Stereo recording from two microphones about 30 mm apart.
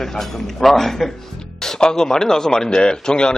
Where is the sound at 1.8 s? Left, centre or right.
Left.